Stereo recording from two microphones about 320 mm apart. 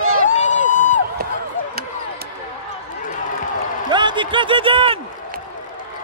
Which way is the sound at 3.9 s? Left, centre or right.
Centre.